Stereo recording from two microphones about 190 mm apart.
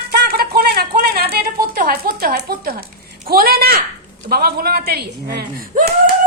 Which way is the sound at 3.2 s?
50° right (ahead or behind).